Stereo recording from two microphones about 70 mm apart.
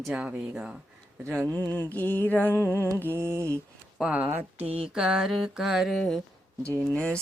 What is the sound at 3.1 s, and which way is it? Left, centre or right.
Mantra, right.